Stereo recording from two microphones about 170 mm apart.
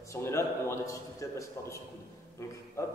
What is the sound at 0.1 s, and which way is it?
A man's voice, 15° left (ahead or behind).